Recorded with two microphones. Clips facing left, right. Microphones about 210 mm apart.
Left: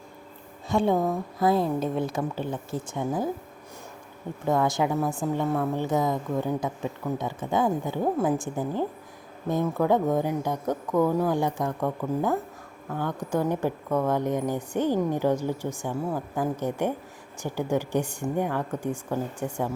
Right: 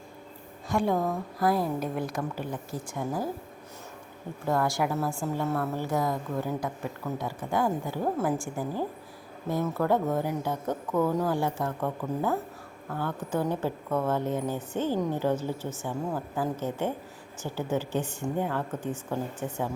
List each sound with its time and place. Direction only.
0.7 s a woman's voice: 25° left (ahead or behind)
4.4 s a woman's voice: 20° left (ahead or behind)